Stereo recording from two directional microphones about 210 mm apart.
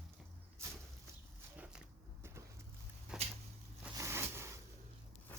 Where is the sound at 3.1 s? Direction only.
5° right (ahead or behind).